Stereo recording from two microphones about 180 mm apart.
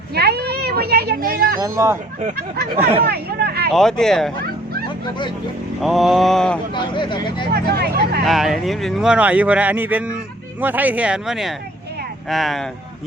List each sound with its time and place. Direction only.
0.1 s a child's voice: 65° right (ahead or behind)
1.5 s speech: 15° right (ahead or behind)
3.0 s speech: 60° right (ahead or behind)
3.7 s speech: centre (ahead or behind)
5.8 s speech: centre (ahead or behind)
6.7 s speech: 25° left (ahead or behind)
7.5 s speech: 65° right (ahead or behind)
8.2 s speech: centre (ahead or behind)